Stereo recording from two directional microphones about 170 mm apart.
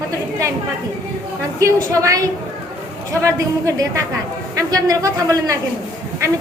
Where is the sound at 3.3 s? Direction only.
20° right (ahead or behind).